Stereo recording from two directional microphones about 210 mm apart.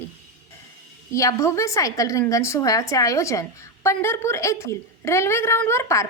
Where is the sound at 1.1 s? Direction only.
15° left (ahead or behind).